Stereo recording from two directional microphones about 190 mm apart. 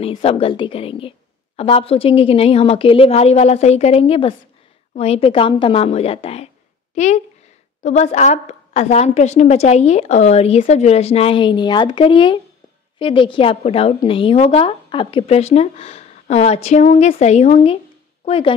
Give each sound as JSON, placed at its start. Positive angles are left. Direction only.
{"t": 0.0, "sound": "a woman's voice", "side_deg": 30}